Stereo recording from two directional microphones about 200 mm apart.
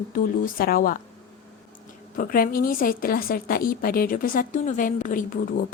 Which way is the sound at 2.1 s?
45° left (ahead or behind).